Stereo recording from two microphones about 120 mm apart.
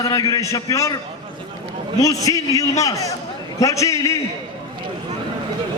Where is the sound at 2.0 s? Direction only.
30° left (ahead or behind).